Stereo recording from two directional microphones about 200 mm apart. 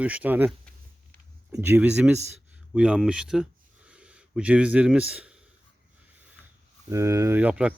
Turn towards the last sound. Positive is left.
turn(degrees=-5)  # may be behind; listen again after turning